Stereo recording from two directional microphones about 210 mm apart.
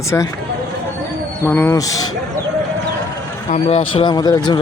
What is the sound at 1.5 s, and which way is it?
Speech, 10° left (ahead or behind).